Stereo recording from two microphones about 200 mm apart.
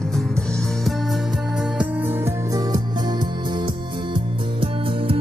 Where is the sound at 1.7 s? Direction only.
10° right (ahead or behind).